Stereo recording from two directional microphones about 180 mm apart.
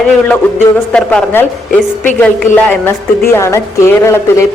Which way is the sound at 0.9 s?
10° left (ahead or behind).